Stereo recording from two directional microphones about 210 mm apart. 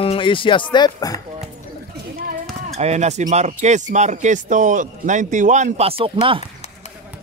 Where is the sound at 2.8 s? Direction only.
30° right (ahead or behind).